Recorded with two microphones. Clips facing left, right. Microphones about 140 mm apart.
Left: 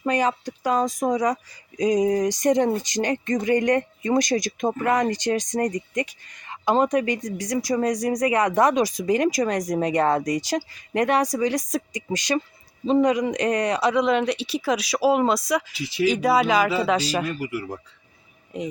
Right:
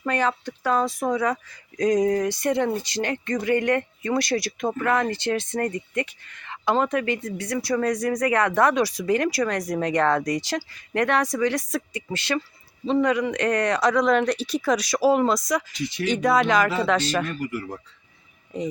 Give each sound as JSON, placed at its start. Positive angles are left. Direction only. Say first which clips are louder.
{"t": 0.0, "sound": "speech", "louder": "left 2 dB", "side_deg": 15}